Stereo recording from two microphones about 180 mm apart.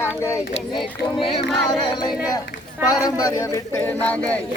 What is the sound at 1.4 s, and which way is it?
Speech, centre (ahead or behind).